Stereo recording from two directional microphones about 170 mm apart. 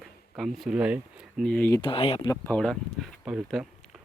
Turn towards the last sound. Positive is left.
turn(degrees=-5)  # may be behind; listen again after turning